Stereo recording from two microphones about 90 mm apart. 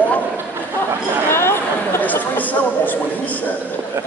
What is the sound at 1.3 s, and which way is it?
Chatter, 25° left (ahead or behind).